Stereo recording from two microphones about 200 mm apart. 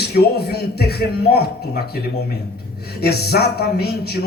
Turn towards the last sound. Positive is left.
turn(degrees=55)  # may be behind; listen again after turning